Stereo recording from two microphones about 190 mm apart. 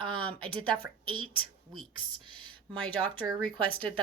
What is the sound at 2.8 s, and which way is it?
Speech, 5° left (ahead or behind).